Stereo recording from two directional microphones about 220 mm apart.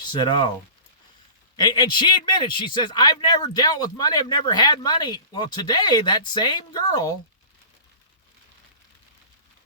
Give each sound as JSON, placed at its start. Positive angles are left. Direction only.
{"t": 0.1, "sound": "speech", "side_deg": 20}
{"t": 1.5, "sound": "speech", "side_deg": 20}